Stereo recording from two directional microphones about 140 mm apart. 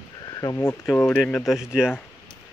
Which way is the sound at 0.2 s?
25° left (ahead or behind).